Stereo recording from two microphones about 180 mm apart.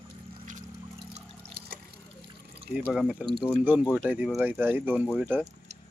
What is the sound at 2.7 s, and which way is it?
Speech, 5° right (ahead or behind).